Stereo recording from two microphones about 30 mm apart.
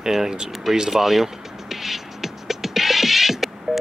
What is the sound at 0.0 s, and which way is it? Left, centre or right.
Speech, centre.